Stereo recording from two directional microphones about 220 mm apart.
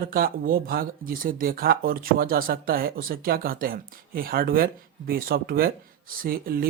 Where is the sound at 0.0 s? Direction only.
40° right (ahead or behind).